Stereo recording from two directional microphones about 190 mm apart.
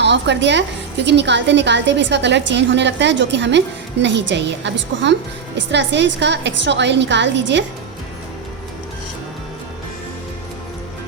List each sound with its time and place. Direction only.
0.0 s a woman's voice: 65° right (ahead or behind)